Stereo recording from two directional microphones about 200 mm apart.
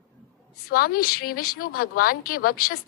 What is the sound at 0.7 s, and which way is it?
Speech, 45° left (ahead or behind).